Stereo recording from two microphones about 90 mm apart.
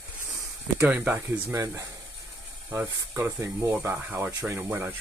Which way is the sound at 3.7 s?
20° right (ahead or behind).